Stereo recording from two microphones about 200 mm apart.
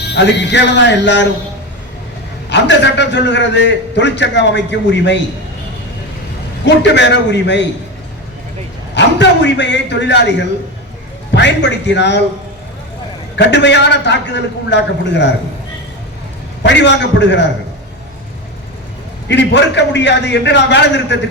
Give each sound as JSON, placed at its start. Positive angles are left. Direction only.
{"t": 0.0, "sound": "a man's voice", "side_deg": 55}
{"t": 2.5, "sound": "a man's voice", "side_deg": 60}
{"t": 6.7, "sound": "a man's voice", "side_deg": 60}
{"t": 9.0, "sound": "a man's voice", "side_deg": 60}
{"t": 13.3, "sound": "a man's voice", "side_deg": 60}
{"t": 16.6, "sound": "a man's voice", "side_deg": 60}
{"t": 19.3, "sound": "a man's voice", "side_deg": 60}